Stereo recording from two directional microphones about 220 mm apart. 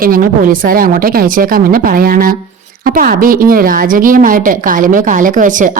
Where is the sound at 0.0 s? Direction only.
40° right (ahead or behind).